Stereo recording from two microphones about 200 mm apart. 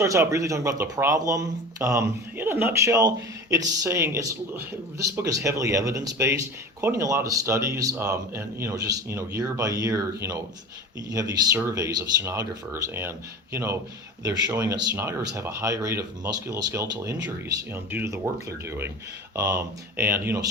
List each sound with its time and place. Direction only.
0.0 s speech: 15° right (ahead or behind)
19.4 s speech: 15° right (ahead or behind)